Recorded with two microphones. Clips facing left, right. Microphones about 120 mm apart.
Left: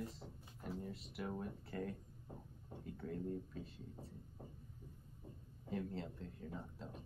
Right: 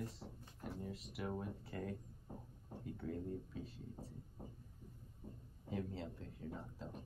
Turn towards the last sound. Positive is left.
turn(degrees=0)  # may be behind; listen again after turning